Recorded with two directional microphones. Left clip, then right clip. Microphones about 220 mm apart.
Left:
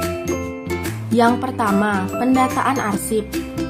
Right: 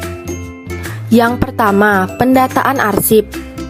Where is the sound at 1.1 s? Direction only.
40° right (ahead or behind).